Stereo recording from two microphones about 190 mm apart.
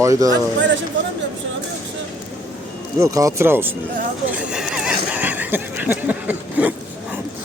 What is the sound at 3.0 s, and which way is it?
Speech, 15° right (ahead or behind).